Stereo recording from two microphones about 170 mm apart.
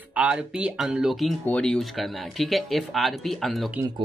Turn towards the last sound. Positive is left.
turn(degrees=0)  # may be behind; listen again after turning